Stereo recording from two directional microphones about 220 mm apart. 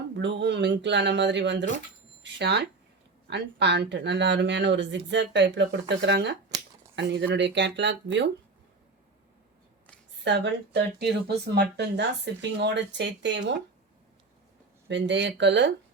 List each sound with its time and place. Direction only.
0.2 s speech: 55° right (ahead or behind)
10.2 s speech: 50° right (ahead or behind)
14.8 s speech: 55° right (ahead or behind)